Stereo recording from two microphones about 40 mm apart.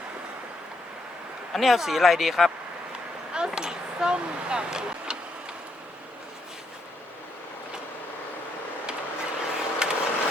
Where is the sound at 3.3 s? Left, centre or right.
Centre.